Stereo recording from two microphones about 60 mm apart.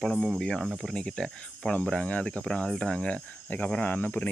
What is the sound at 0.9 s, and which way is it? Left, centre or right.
Speech, centre.